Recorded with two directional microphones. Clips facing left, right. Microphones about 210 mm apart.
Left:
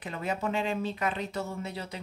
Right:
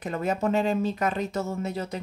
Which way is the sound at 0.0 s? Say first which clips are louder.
Right 6 dB; 45° right (ahead or behind).